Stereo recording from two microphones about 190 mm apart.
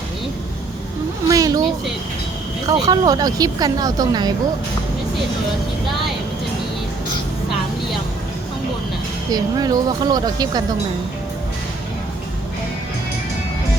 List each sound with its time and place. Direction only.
1.3 s a sound: 20° right (ahead or behind)
2.6 s speech: 20° right (ahead or behind)
9.3 s speech: 20° right (ahead or behind)